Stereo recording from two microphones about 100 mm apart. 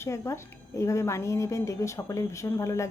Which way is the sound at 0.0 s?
30° left (ahead or behind).